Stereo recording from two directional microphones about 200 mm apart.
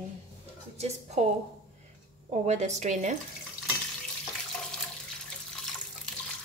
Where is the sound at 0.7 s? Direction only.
30° right (ahead or behind).